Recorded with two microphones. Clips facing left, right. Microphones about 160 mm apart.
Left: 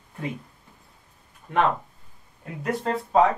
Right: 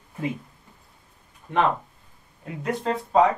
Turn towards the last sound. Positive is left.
turn(degrees=0)  # may be behind; listen again after turning